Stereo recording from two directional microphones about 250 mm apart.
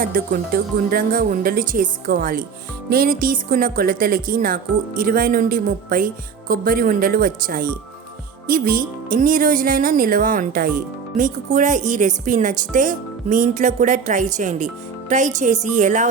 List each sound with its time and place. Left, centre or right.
0.0 s speech: right